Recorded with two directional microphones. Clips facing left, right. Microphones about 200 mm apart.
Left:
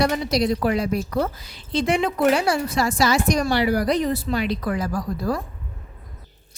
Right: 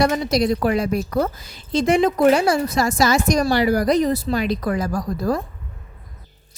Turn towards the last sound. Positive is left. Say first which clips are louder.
# right 3 dB
turn(degrees=-45)  # may be behind; listen again after turning